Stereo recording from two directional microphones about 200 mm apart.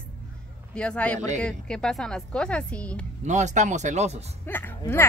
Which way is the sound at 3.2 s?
35° right (ahead or behind).